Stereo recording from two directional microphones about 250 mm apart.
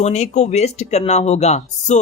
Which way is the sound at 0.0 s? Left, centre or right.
Left.